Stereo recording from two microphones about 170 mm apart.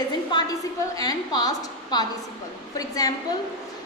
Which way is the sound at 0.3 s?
25° left (ahead or behind).